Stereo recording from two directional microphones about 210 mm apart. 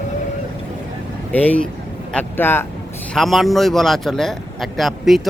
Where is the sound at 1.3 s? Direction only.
10° left (ahead or behind).